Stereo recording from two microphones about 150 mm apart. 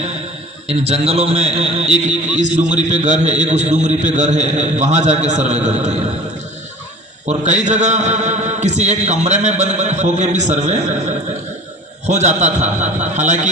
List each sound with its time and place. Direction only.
0.7 s a man's voice: 40° right (ahead or behind)
7.3 s a man's voice: 50° right (ahead or behind)
12.0 s a man's voice: 50° right (ahead or behind)